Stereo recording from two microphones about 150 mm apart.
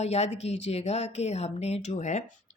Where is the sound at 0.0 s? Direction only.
45° left (ahead or behind).